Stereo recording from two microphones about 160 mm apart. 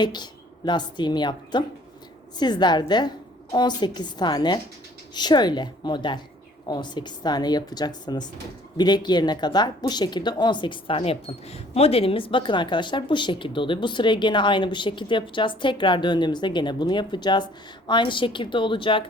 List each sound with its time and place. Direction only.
0.0 s speech: 25° left (ahead or behind)